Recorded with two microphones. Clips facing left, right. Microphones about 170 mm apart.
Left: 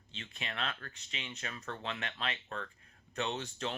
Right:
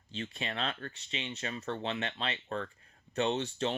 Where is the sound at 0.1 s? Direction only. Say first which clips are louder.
Right 6 dB; 35° right (ahead or behind).